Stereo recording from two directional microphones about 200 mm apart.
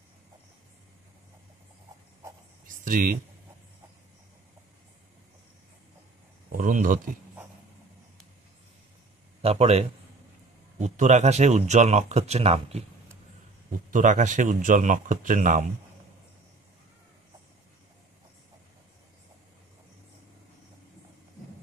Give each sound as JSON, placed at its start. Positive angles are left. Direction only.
{"t": 2.7, "sound": "a sound", "side_deg": -40}
{"t": 6.5, "sound": "speech", "side_deg": -45}
{"t": 9.4, "sound": "speech", "side_deg": -30}